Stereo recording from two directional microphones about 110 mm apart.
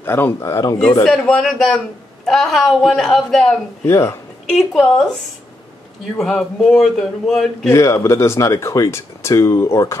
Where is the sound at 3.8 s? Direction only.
25° left (ahead or behind).